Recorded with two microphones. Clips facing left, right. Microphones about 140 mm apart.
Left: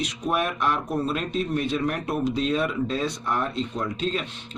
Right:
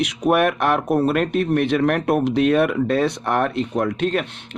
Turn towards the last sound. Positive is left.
turn(degrees=-60)  # may be behind; listen again after turning